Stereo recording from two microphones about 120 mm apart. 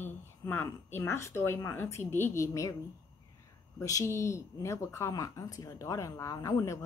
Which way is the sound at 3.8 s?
25° left (ahead or behind).